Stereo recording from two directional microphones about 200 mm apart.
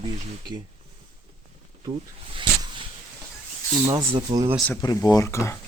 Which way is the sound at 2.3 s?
25° right (ahead or behind).